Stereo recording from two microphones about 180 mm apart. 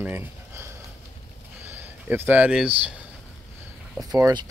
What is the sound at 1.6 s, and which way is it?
Speech, 10° right (ahead or behind).